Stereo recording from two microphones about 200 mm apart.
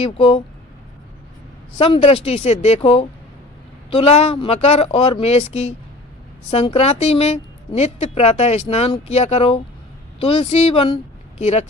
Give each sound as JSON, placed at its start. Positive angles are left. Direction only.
{"t": 0.0, "sound": "speech", "side_deg": 30}
{"t": 1.8, "sound": "a woman's voice", "side_deg": 30}